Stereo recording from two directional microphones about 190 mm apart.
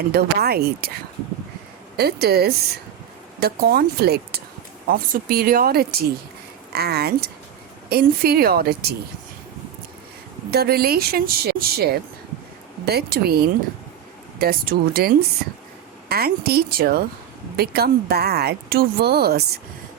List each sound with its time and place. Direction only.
0.1 s speech: 55° right (ahead or behind)
2.0 s speech: 55° right (ahead or behind)
10.5 s speech: 55° right (ahead or behind)